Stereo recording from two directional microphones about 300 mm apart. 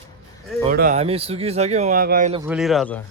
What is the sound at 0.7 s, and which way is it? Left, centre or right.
Speech, right.